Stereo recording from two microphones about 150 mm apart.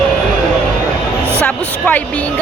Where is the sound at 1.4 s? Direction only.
10° left (ahead or behind).